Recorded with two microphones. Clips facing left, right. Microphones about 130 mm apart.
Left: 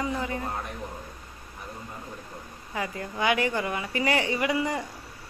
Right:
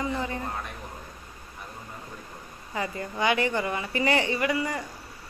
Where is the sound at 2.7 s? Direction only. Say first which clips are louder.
Right 1 dB; 5° left (ahead or behind).